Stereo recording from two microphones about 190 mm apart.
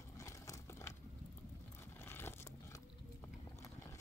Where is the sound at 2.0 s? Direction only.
10° left (ahead or behind).